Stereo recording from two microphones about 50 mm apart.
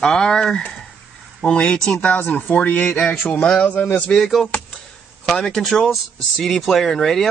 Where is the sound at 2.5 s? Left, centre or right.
Left.